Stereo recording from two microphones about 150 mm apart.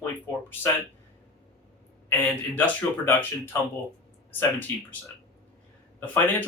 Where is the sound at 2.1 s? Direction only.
10° left (ahead or behind).